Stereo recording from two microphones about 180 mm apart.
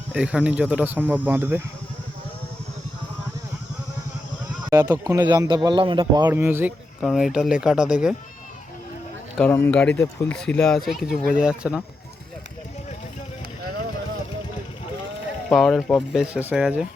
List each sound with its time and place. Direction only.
0.1 s speech: 5° right (ahead or behind)
4.7 s speech: 10° right (ahead or behind)
5.2 s a man's voice: 25° right (ahead or behind)
6.2 s speech: 15° right (ahead or behind)
7.0 s speech: centre (ahead or behind)
9.4 s speech: 10° left (ahead or behind); by 11.8 s 5° right (ahead or behind)
15.4 s speech: centre (ahead or behind)